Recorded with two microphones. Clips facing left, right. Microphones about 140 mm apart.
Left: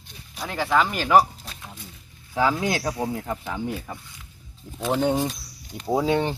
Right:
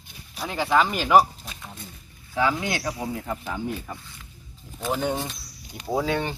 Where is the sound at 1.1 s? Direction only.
5° right (ahead or behind).